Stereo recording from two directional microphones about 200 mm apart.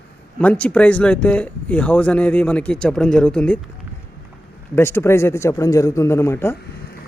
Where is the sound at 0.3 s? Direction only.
5° left (ahead or behind).